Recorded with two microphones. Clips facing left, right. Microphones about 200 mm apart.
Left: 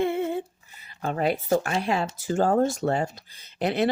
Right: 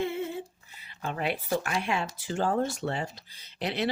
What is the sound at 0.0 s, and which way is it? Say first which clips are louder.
Humming: left 6 dB; 55° left (ahead or behind).